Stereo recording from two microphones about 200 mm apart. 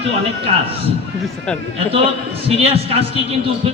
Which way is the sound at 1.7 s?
30° right (ahead or behind).